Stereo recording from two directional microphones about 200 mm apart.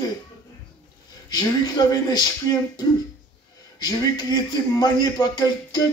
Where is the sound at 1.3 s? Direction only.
20° left (ahead or behind).